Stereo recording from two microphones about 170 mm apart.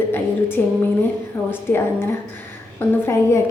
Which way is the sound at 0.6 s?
10° left (ahead or behind).